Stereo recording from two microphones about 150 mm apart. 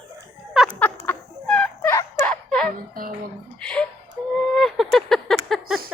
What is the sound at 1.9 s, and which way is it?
Turkey, 20° left (ahead or behind).